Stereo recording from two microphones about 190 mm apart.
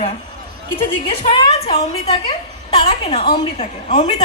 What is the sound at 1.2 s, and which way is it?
A woman's voice, 30° left (ahead or behind).